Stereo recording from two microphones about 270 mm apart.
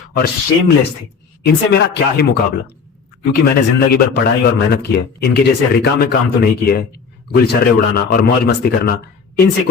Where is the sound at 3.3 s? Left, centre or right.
Left.